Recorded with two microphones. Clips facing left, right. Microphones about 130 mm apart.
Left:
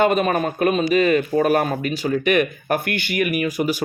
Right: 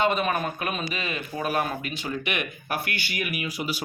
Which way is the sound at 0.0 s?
45° left (ahead or behind).